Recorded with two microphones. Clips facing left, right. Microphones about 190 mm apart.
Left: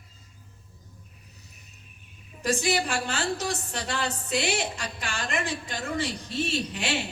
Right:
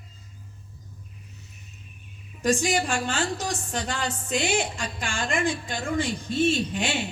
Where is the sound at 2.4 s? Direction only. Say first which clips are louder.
Right 3 dB; 35° left (ahead or behind).